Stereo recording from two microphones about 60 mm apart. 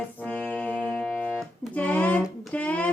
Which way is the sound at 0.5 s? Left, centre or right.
Left.